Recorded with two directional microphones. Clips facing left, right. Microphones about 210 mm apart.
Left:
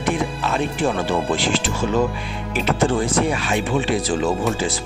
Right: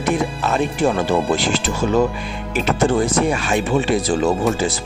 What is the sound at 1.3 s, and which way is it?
Speech, 40° right (ahead or behind).